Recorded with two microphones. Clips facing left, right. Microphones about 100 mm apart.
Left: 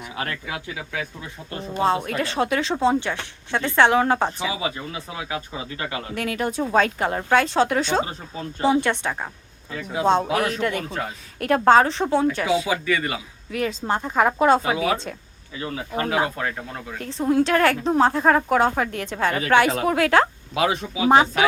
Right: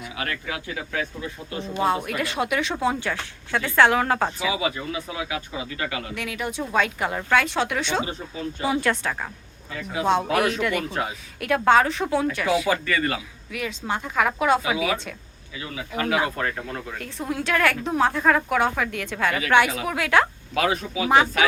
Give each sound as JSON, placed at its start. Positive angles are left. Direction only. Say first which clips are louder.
{"t": 0.2, "sound": "speech", "louder": "left 1 dB", "side_deg": 30}
{"t": 2.0, "sound": "speech", "louder": "left 2 dB", "side_deg": 30}
{"t": 6.1, "sound": "speech", "louder": "left 8 dB", "side_deg": 40}
{"t": 10.8, "sound": "speech", "louder": "right 1 dB", "side_deg": -5}
{"t": 11.3, "sound": "speech", "louder": "left 3 dB", "side_deg": 40}
{"t": 12.6, "sound": "speech", "louder": "even", "side_deg": 10}
{"t": 13.5, "sound": "speech", "louder": "left 4 dB", "side_deg": 40}
{"t": 20.6, "sound": "speech", "louder": "left 1 dB", "side_deg": 20}
{"t": 21.1, "sound": "speech", "louder": "left 3 dB", "side_deg": 30}